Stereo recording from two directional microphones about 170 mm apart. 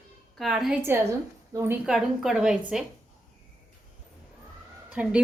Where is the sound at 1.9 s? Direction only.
Centre (ahead or behind).